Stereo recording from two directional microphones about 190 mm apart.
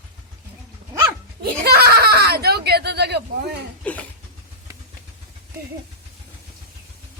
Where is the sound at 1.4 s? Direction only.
55° right (ahead or behind).